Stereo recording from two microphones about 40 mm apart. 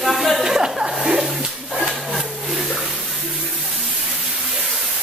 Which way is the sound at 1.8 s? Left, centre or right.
Centre.